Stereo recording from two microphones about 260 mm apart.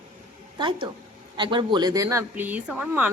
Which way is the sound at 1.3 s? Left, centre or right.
Centre.